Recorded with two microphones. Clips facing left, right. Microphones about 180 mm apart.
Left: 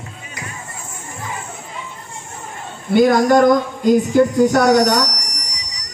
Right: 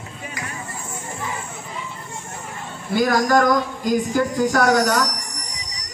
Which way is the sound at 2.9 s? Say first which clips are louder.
Left 6 dB; 25° left (ahead or behind).